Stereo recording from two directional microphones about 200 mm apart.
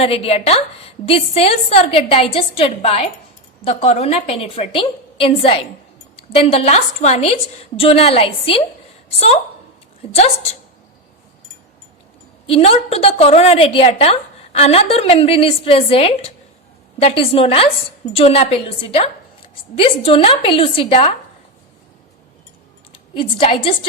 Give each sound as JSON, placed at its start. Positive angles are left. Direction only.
{"t": 0.0, "sound": "a woman's voice", "side_deg": 30}
{"t": 12.5, "sound": "a woman's voice", "side_deg": 30}
{"t": 23.1, "sound": "a woman's voice", "side_deg": 25}